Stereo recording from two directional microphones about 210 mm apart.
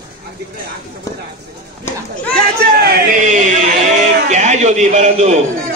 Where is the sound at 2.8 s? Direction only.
45° right (ahead or behind).